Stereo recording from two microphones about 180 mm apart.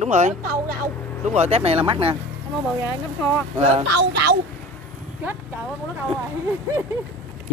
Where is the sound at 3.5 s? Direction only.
35° right (ahead or behind).